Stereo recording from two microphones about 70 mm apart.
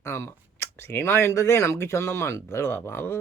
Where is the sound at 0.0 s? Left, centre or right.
Left.